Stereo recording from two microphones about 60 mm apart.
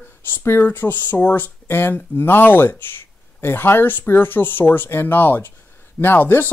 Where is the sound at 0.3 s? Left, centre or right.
Left.